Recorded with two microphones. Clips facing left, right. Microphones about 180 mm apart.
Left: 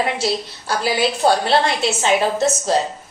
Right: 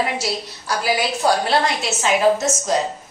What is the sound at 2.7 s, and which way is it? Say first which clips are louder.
Speech: even; 30° left (ahead or behind).